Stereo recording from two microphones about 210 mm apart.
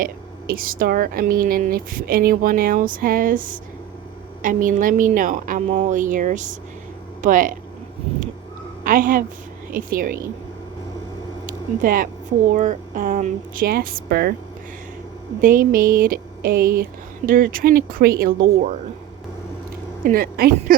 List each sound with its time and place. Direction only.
0.0 s a woman's voice: 45° right (ahead or behind)
8.8 s a woman's voice: 40° right (ahead or behind)
11.4 s a sound: 40° right (ahead or behind)
12.5 s a woman's voice: 40° right (ahead or behind)
15.4 s speech: 40° right (ahead or behind)
20.1 s speech: 45° right (ahead or behind)